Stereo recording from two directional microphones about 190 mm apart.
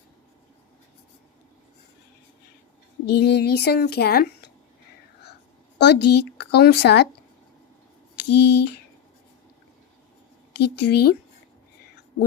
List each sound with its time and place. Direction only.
3.2 s speech: 60° left (ahead or behind)
5.8 s speech: 60° left (ahead or behind)
8.2 s speech: 60° left (ahead or behind)
10.5 s speech: 65° left (ahead or behind)